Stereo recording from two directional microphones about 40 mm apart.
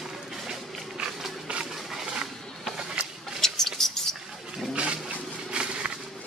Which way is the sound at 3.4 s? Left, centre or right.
Centre.